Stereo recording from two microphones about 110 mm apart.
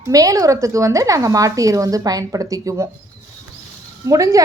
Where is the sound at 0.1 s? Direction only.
30° right (ahead or behind).